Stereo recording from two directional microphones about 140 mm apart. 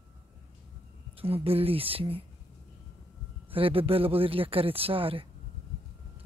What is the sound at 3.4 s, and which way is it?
Speech, 40° right (ahead or behind).